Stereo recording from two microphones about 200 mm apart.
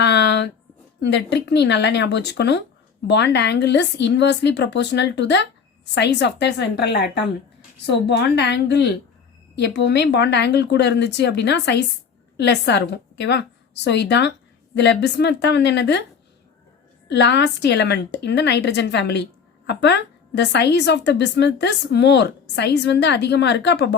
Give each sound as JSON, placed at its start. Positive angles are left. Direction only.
{"t": 0.0, "sound": "a sound", "side_deg": 60}
{"t": 1.0, "sound": "a woman's voice", "side_deg": 60}
{"t": 17.1, "sound": "a woman's voice", "side_deg": 60}